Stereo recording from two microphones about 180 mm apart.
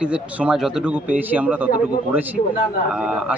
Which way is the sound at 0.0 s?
5° right (ahead or behind).